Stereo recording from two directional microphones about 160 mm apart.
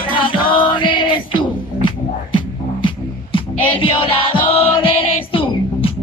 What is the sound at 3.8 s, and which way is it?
Music, 35° left (ahead or behind).